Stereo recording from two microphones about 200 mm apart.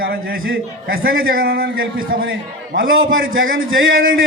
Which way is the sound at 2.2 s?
75° right (ahead or behind).